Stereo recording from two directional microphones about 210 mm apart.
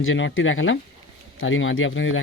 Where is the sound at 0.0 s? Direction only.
65° left (ahead or behind).